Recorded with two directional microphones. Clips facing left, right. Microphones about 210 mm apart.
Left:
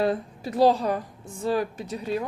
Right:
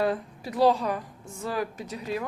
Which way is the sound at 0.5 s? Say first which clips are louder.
Left 2 dB; 40° left (ahead or behind).